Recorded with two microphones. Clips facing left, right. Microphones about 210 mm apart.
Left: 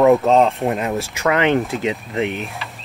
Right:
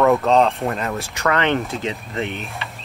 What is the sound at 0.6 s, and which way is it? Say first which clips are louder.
Speech: left 3 dB; 15° left (ahead or behind).